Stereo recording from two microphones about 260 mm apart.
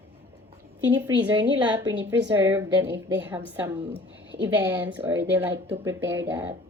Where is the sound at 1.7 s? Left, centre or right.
Centre.